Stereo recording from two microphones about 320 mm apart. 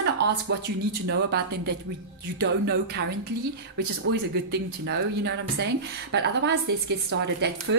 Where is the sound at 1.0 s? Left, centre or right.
Right.